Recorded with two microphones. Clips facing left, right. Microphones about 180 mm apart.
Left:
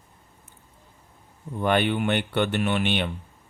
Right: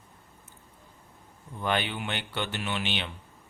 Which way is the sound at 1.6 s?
55° left (ahead or behind).